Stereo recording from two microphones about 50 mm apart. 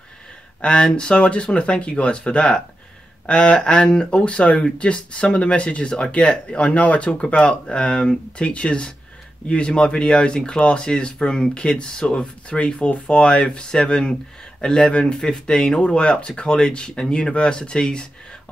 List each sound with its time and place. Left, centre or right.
0.6 s speech: centre